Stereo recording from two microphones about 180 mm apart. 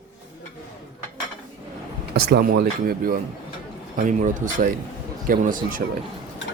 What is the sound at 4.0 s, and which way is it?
Speech, 45° right (ahead or behind).